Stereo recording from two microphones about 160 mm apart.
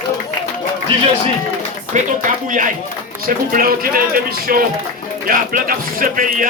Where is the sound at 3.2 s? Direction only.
65° right (ahead or behind).